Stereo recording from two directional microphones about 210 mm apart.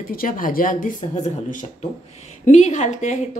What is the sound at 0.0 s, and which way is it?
Speech, 40° left (ahead or behind).